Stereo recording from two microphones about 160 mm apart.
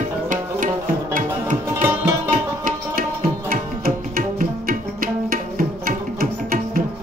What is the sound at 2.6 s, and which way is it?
Tabla, 60° right (ahead or behind).